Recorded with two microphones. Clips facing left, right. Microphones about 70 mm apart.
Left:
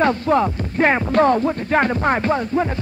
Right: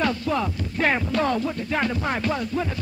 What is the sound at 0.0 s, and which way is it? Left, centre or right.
Music, left.